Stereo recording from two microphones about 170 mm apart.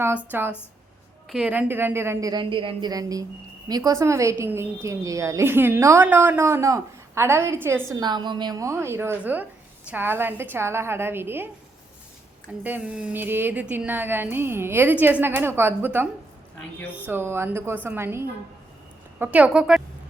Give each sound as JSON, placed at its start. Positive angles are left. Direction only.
{"t": 0.3, "sound": "a woman's voice", "side_deg": -10}
{"t": 2.3, "sound": "a woman's voice", "side_deg": -30}
{"t": 12.5, "sound": "a woman's voice", "side_deg": -10}
{"t": 16.8, "sound": "speech", "side_deg": 10}
{"t": 17.1, "sound": "a woman's voice", "side_deg": -15}